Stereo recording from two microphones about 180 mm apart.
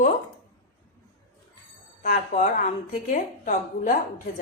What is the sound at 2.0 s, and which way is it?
Speech, 45° left (ahead or behind).